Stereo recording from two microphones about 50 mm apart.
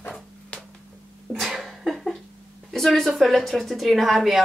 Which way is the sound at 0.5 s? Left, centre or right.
Left.